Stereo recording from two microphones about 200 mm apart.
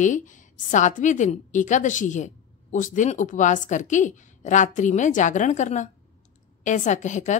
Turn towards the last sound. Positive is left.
turn(degrees=35)  # may be behind; listen again after turning